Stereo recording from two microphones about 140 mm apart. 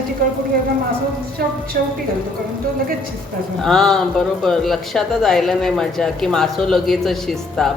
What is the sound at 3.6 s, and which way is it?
Speech, 5° left (ahead or behind).